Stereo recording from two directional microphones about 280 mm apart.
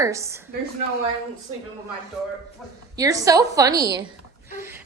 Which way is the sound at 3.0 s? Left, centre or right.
Centre.